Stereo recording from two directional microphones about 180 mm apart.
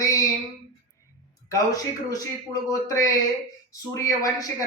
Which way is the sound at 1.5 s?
20° left (ahead or behind).